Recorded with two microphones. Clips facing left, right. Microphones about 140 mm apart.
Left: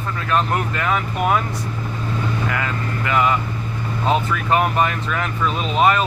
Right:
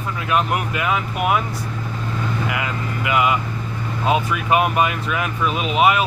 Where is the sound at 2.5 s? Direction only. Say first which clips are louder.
Left 1 dB; 10° right (ahead or behind).